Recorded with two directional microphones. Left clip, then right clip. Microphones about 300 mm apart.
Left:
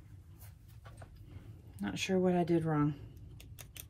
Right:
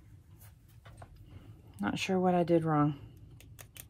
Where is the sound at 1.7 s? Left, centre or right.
Centre.